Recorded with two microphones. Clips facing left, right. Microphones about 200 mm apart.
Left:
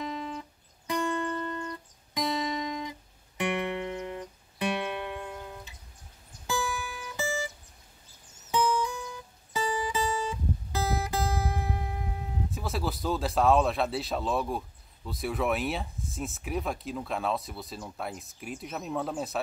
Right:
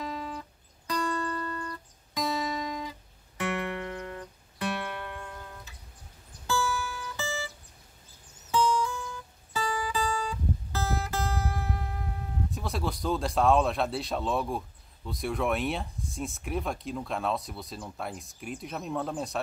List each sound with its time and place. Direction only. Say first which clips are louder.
0.0 s music: left 1 dB; 20° left (ahead or behind)
6.4 s guitar: right 2 dB; 15° left (ahead or behind)
8.5 s music: right 1 dB; 15° left (ahead or behind)
12.4 s speech: even; centre (ahead or behind)